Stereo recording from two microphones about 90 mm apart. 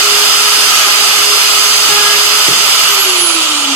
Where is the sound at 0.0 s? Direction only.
15° right (ahead or behind).